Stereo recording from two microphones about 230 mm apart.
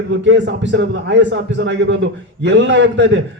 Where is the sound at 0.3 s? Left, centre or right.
Right.